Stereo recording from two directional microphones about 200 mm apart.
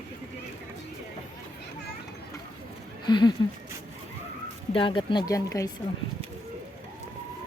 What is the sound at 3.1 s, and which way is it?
Speech, 20° left (ahead or behind).